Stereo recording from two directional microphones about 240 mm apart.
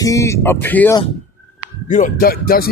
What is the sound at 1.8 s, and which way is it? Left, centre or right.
Speech, left.